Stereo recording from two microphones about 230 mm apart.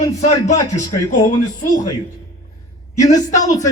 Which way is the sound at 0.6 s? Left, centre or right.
Centre.